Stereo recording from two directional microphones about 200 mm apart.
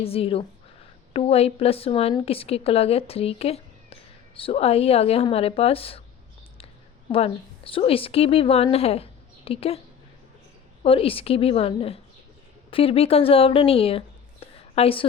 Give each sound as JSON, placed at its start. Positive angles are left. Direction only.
{"t": 0.0, "sound": "a woman's voice", "side_deg": 30}
{"t": 7.1, "sound": "a woman's voice", "side_deg": 25}
{"t": 10.8, "sound": "a woman's voice", "side_deg": 30}